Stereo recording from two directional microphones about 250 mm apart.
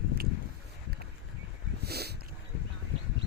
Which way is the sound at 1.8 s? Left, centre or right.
Right.